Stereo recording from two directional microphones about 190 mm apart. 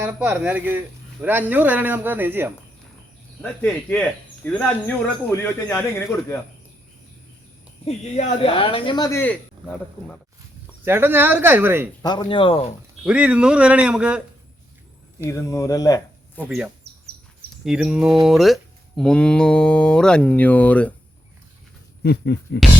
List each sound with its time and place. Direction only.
0.0 s speech: 10° right (ahead or behind)
3.4 s speech: 10° left (ahead or behind)
7.9 s speech: 30° left (ahead or behind); by 10.2 s 5° left (ahead or behind)
10.8 s speech: 10° right (ahead or behind)
12.0 s speech: 25° left (ahead or behind)
13.1 s speech: 5° right (ahead or behind)
15.2 s speech: 15° left (ahead or behind)
16.5 s speech: 10° right (ahead or behind); by 20.9 s 5° left (ahead or behind)
22.0 s speech: 60° left (ahead or behind)